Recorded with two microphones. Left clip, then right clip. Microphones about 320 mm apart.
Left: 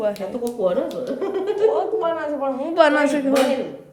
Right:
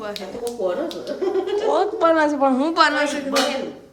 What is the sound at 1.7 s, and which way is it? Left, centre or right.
A woman's voice, centre.